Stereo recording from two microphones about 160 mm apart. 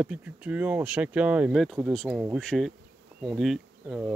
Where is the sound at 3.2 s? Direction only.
Centre (ahead or behind).